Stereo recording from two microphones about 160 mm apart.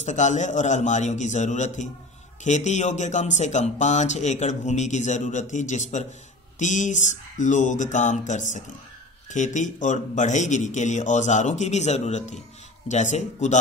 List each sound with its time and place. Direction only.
0.0 s speech: 50° left (ahead or behind)